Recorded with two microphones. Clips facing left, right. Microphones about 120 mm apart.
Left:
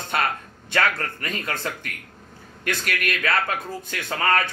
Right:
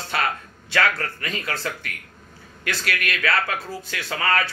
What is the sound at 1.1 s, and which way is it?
Speech, 40° left (ahead or behind).